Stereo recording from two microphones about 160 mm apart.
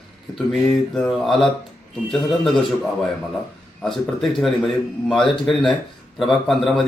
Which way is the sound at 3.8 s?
Centre (ahead or behind).